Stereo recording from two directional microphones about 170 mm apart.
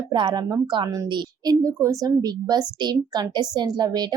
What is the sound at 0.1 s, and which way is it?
A woman's voice, 25° right (ahead or behind).